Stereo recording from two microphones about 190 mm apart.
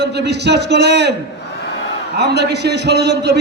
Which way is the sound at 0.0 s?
60° right (ahead or behind).